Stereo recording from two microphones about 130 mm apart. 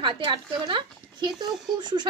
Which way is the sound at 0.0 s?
35° right (ahead or behind).